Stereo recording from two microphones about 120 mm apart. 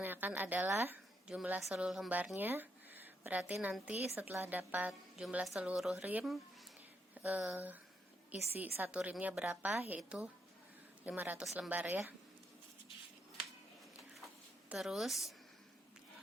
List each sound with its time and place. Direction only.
0.0 s a woman's voice: 15° right (ahead or behind)
14.7 s a woman's voice: 5° right (ahead or behind)